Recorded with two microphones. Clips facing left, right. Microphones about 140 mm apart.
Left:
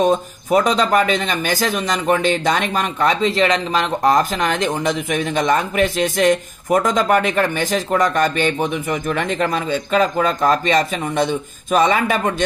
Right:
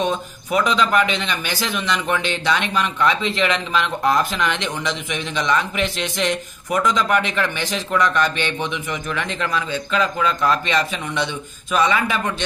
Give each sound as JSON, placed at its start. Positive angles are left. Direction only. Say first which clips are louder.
{"t": 0.0, "sound": "speech", "louder": "left 6 dB", "side_deg": 45}